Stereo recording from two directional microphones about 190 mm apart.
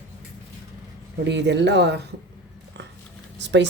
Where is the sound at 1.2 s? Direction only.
65° right (ahead or behind).